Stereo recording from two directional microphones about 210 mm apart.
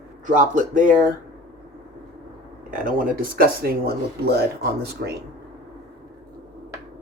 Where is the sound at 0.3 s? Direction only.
40° right (ahead or behind).